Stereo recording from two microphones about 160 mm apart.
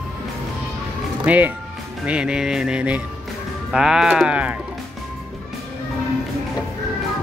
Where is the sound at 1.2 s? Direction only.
10° right (ahead or behind).